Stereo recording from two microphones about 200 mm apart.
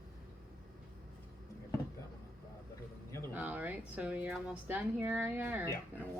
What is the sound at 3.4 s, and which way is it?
Speech, 10° right (ahead or behind).